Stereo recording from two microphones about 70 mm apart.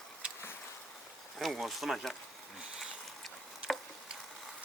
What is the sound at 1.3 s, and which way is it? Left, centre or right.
Speech, centre.